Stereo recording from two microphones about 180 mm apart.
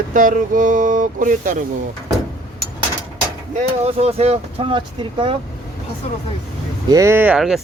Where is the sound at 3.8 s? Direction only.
35° right (ahead or behind).